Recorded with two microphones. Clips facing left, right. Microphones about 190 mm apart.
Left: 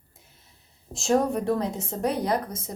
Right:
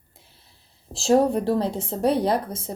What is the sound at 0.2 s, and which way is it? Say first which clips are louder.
A woman's voice: right 2 dB; 30° right (ahead or behind).